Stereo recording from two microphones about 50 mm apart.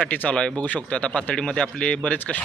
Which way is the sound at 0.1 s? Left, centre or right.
Left.